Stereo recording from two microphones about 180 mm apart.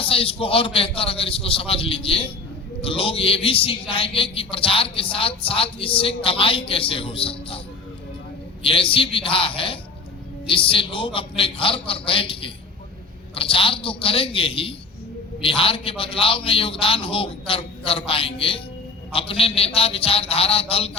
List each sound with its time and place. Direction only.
0.0 s a man's voice: 30° left (ahead or behind)
8.6 s a man's voice: 30° left (ahead or behind)